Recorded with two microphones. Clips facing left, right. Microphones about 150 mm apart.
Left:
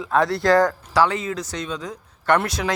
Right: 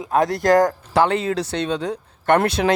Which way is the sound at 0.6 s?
55° right (ahead or behind).